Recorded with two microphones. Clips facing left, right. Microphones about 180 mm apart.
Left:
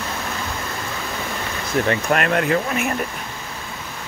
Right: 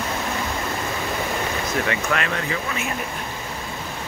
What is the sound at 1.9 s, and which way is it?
Speech, 50° left (ahead or behind).